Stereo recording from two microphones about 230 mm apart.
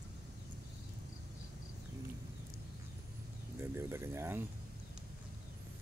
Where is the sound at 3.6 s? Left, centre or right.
Centre.